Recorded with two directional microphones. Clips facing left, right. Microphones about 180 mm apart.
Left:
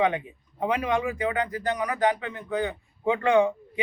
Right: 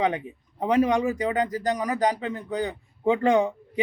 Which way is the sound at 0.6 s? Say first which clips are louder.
Right 4 dB; 40° right (ahead or behind).